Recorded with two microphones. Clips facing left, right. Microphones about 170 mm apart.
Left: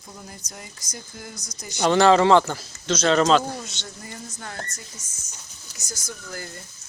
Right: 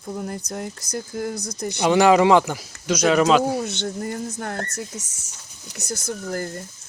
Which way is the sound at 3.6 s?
60° right (ahead or behind).